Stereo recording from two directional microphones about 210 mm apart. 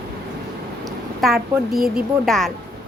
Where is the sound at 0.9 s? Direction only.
Centre (ahead or behind).